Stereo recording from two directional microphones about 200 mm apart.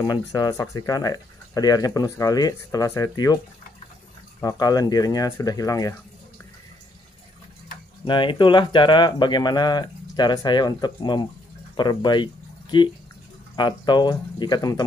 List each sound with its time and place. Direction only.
0.3 s speech: 15° left (ahead or behind)
4.4 s speech: 20° left (ahead or behind)
8.0 s speech: 25° left (ahead or behind)